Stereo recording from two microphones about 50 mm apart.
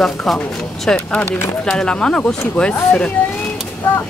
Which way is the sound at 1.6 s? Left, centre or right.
Centre.